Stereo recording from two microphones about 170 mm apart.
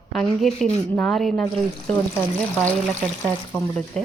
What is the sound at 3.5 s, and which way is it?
Speech, 5° left (ahead or behind).